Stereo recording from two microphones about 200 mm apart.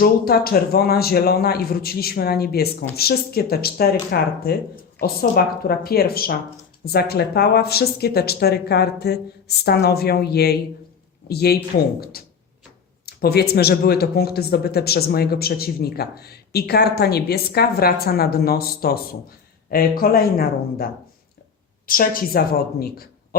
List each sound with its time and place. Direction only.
0.0 s speech: 50° left (ahead or behind)
21.8 s speech: 45° left (ahead or behind)